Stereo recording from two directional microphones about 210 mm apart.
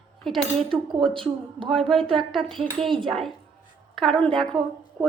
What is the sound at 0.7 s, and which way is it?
Cutlery, 25° right (ahead or behind).